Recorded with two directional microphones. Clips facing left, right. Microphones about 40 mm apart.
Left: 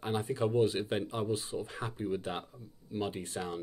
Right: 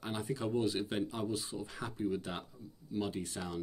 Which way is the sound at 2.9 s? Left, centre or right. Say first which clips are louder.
Left 1 dB; left.